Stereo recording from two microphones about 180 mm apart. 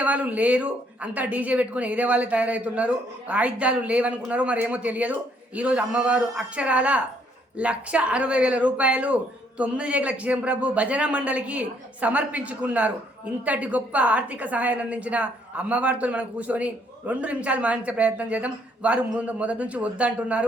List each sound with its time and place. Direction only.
0.0 s a woman's voice: 10° right (ahead or behind)